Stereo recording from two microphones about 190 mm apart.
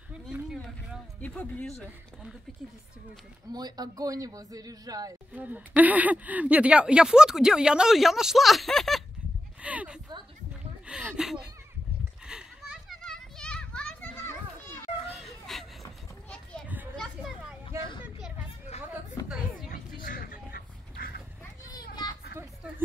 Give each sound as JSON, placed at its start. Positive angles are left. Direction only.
{"t": 1.2, "sound": "speech", "side_deg": 5}
{"t": 3.5, "sound": "a man's voice", "side_deg": -20}
{"t": 9.6, "sound": "a sound", "side_deg": -5}
{"t": 10.9, "sound": "speech", "side_deg": -5}
{"t": 12.3, "sound": "children playing", "side_deg": -5}
{"t": 15.1, "sound": "a sound", "side_deg": 0}
{"t": 16.9, "sound": "children playing", "side_deg": 0}
{"t": 18.8, "sound": "chatter", "side_deg": -5}
{"t": 19.7, "sound": "a sound", "side_deg": 50}